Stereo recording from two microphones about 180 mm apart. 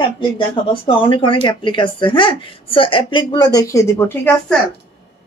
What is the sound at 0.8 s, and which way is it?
A woman's voice, 25° left (ahead or behind).